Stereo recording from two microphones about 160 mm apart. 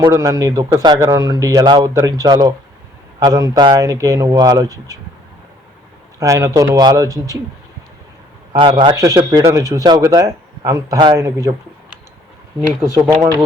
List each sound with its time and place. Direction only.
0.0 s a man's voice: 20° right (ahead or behind)
6.1 s a man's voice: 20° right (ahead or behind)
8.5 s a man's voice: 30° right (ahead or behind)